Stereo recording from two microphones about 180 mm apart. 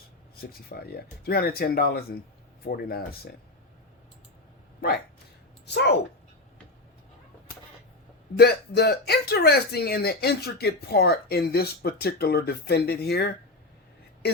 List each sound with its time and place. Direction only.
0.3 s speech: 55° left (ahead or behind)
5.6 s a woman's voice: 70° left (ahead or behind)
8.4 s speech: 65° left (ahead or behind)